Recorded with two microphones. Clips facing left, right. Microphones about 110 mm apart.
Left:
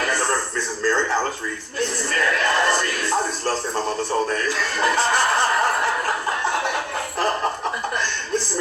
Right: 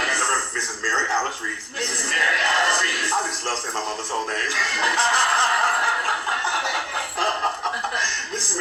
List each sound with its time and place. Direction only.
0.0 s television: 50° left (ahead or behind)
1.8 s a sound: 45° left (ahead or behind)
4.3 s chuckle: 50° left (ahead or behind)